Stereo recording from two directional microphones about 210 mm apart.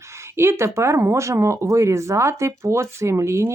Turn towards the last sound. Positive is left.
turn(degrees=-15)  # may be behind; listen again after turning